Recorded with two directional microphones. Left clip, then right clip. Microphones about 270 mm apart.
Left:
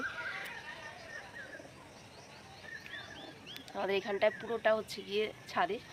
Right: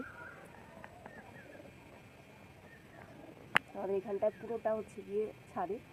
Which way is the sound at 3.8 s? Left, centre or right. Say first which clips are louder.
Left 3 dB; centre.